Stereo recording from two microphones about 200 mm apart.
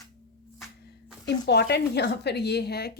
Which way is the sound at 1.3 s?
55° left (ahead or behind).